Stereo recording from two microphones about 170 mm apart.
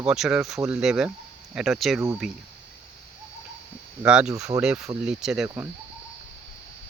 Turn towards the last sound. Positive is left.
turn(degrees=-15)  # may be behind; listen again after turning